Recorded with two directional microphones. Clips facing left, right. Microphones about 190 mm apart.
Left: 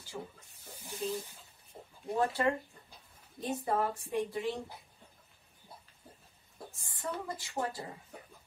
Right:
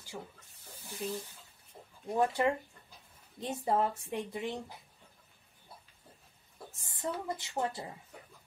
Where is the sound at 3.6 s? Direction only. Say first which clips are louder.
Right 3 dB; 20° right (ahead or behind).